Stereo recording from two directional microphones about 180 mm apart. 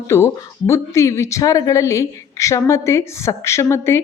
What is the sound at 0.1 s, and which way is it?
A woman's voice, 15° left (ahead or behind).